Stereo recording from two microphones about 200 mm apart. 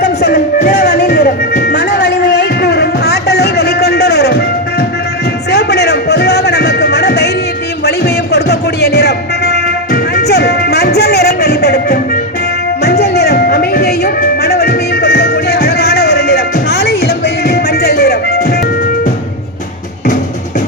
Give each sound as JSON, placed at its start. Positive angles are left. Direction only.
{"t": 0.0, "sound": "music", "side_deg": 50}